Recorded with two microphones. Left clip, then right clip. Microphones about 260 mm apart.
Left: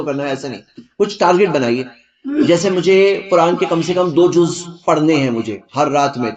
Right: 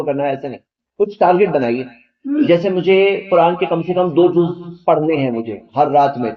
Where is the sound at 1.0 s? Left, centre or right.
Left.